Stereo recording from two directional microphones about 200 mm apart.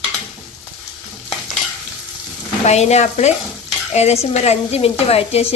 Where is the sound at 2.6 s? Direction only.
35° left (ahead or behind).